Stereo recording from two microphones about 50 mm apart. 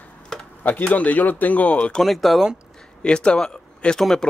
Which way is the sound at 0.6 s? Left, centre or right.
Left.